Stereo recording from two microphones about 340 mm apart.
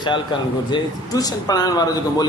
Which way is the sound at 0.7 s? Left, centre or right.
Centre.